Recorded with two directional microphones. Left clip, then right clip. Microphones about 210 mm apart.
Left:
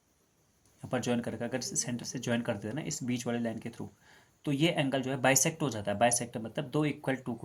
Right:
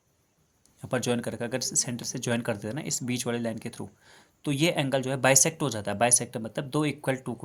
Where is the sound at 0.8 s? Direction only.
40° right (ahead or behind).